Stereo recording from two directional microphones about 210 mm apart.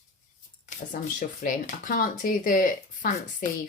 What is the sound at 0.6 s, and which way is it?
Speech, 35° left (ahead or behind).